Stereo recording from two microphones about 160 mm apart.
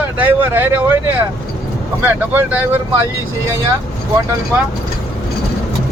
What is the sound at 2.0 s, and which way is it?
Speech, 10° right (ahead or behind).